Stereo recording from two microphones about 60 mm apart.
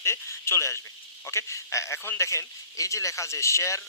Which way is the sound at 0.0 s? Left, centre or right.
Left.